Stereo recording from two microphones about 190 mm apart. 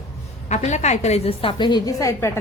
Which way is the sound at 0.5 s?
35° left (ahead or behind).